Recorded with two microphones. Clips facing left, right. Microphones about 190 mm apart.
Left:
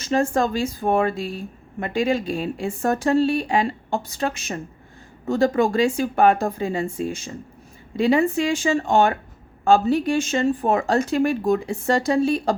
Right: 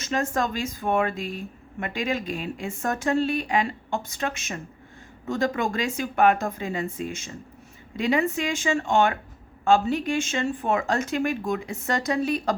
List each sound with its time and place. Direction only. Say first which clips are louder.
0.0 s speech: left 5 dB; 30° left (ahead or behind)